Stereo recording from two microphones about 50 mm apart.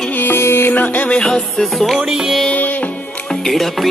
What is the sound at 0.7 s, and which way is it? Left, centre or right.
Music, left.